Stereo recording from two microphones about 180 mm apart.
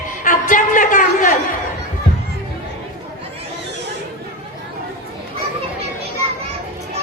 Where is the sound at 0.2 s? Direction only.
45° left (ahead or behind).